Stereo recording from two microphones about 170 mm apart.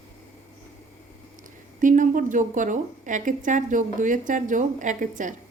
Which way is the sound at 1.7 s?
50° right (ahead or behind).